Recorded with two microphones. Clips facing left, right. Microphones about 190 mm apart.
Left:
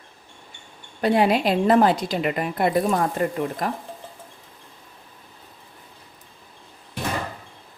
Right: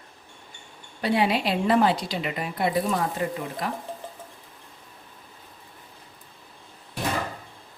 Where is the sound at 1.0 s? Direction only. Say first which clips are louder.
Left 4 dB; 45° left (ahead or behind).